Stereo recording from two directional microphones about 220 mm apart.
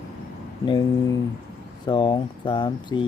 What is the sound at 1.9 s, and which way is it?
Speech, 20° left (ahead or behind).